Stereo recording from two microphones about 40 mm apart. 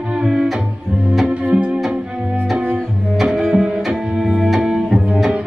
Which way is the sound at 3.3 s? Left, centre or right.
Centre.